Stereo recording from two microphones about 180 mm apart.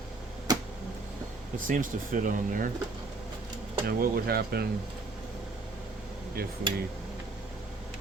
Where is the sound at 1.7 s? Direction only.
45° right (ahead or behind).